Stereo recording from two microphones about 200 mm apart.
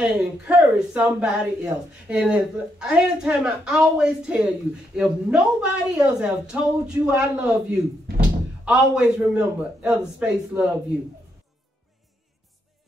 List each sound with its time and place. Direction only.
0.0 s speech: 5° right (ahead or behind)